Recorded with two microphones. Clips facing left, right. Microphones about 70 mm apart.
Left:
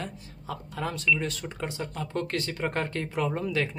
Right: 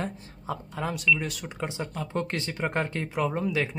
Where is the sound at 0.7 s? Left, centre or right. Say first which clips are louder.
Right 1 dB; centre.